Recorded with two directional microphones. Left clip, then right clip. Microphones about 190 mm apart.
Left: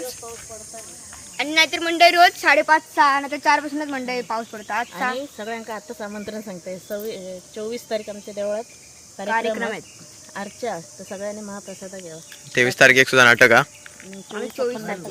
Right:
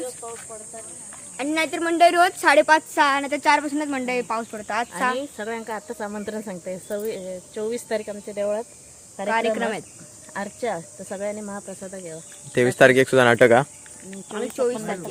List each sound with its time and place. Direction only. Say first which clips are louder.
1.4 s speech: left 5 dB; 45° right (ahead or behind)
3.0 s speech: left 2 dB; 30° right (ahead or behind)
5.5 s cricket: right 1 dB; 15° right (ahead or behind)
9.2 s speech: even; 35° right (ahead or behind)
14.1 s speech: right 1 dB; 45° right (ahead or behind)